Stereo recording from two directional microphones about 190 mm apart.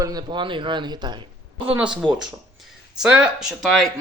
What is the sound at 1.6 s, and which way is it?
Speech, 5° right (ahead or behind).